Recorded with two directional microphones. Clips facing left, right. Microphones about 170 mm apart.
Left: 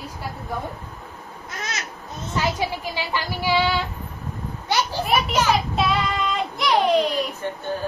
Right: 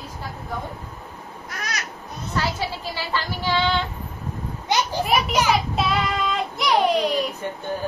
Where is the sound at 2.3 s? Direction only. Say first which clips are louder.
Left 2 dB; 15° left (ahead or behind).